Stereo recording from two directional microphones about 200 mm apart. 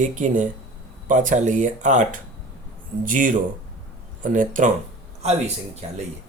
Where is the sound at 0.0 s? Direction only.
40° right (ahead or behind).